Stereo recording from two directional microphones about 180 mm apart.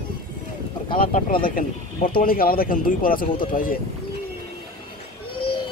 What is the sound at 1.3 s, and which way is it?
Speech, 50° left (ahead or behind).